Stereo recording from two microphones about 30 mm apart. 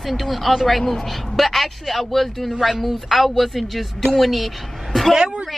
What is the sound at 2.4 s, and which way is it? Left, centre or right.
A woman's voice, centre.